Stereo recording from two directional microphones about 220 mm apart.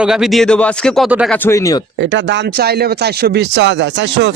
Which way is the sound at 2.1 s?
50° right (ahead or behind).